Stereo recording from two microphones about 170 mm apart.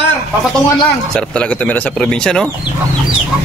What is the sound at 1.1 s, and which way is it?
Speech, 5° left (ahead or behind).